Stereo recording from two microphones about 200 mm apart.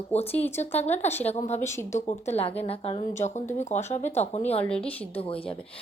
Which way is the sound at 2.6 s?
30° left (ahead or behind).